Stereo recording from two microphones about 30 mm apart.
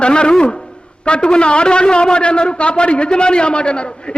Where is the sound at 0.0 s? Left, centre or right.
Left.